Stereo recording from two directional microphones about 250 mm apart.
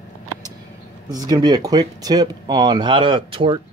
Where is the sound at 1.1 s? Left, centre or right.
Centre.